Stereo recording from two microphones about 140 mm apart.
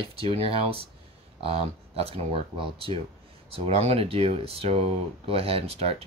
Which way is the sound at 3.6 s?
45° right (ahead or behind).